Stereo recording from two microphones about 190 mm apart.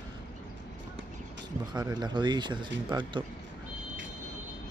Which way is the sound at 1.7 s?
20° right (ahead or behind).